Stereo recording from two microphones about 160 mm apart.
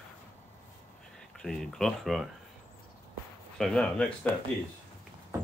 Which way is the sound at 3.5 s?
5° left (ahead or behind).